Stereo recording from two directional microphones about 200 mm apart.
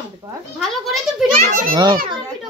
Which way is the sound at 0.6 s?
Centre (ahead or behind).